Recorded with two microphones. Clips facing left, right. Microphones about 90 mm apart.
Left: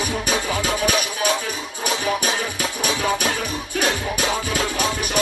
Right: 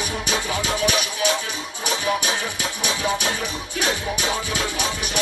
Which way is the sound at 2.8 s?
45° left (ahead or behind).